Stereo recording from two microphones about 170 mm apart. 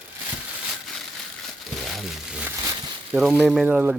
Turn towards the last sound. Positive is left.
turn(degrees=-10)  # may be behind; listen again after turning